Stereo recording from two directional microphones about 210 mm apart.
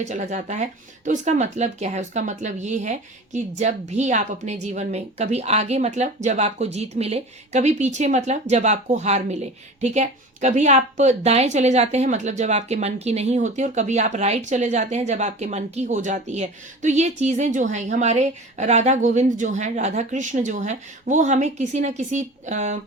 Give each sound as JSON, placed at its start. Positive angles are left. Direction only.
{"t": 0.0, "sound": "speech", "side_deg": -35}